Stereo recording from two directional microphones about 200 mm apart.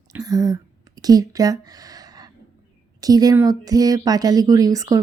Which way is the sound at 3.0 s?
20° right (ahead or behind).